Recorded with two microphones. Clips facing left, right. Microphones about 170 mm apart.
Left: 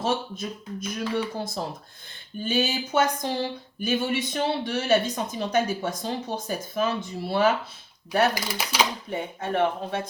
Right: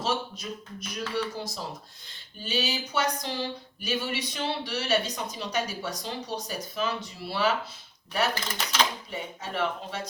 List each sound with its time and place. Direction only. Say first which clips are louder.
0.0 s speech: left 3 dB; 50° left (ahead or behind)
8.4 s speech: left 2 dB; 10° left (ahead or behind)
9.0 s speech: left 6 dB; 50° left (ahead or behind)